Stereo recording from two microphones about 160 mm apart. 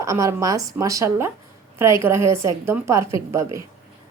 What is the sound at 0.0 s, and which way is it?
A woman's voice, 20° right (ahead or behind).